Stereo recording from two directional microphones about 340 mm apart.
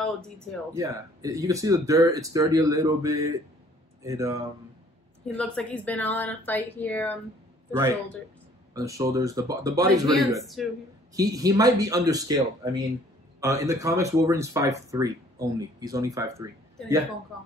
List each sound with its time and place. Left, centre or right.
0.7 s speech: centre
5.4 s speech: centre
7.7 s speech: centre
10.3 s speech: centre